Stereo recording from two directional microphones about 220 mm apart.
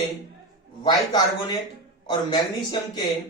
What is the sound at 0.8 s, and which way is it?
Speech, 20° left (ahead or behind).